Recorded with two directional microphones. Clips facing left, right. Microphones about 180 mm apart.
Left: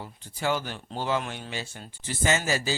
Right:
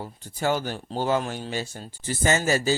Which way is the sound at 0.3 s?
45° right (ahead or behind).